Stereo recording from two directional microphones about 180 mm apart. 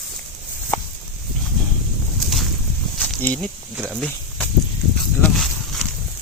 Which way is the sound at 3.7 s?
10° right (ahead or behind).